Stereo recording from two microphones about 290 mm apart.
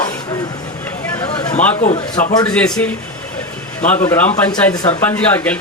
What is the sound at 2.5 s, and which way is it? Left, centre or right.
Speech, centre.